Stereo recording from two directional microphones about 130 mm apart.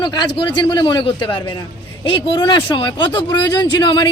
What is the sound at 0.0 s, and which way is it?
A woman's voice, 35° left (ahead or behind).